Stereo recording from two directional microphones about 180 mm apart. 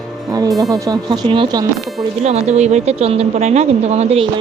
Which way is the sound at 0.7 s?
20° right (ahead or behind).